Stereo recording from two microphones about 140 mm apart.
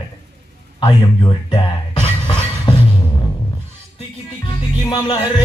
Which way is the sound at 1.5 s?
40° left (ahead or behind).